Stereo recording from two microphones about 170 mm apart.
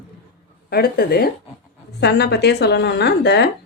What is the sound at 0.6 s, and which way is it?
Speech, 65° left (ahead or behind).